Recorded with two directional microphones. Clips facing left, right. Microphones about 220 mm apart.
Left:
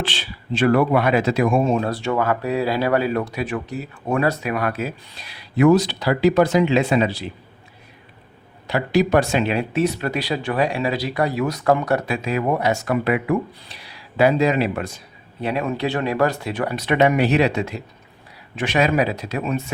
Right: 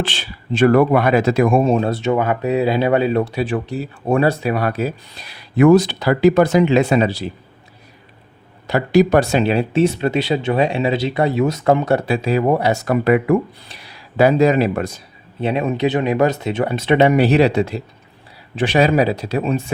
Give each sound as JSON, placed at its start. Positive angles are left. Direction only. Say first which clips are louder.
{"t": 0.1, "sound": "speech", "louder": "right 2 dB", "side_deg": -50}
{"t": 1.6, "sound": "speech", "louder": "right 4 dB", "side_deg": -35}
{"t": 1.9, "sound": "speech", "louder": "right 3 dB", "side_deg": -20}
{"t": 8.6, "sound": "speech", "louder": "right 5 dB", "side_deg": -45}
{"t": 15.4, "sound": "speech", "louder": "right 4 dB", "side_deg": -20}